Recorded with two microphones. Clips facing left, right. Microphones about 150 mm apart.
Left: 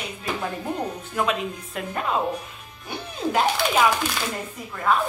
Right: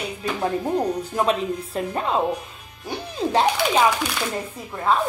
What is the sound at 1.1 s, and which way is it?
Speech, 35° right (ahead or behind).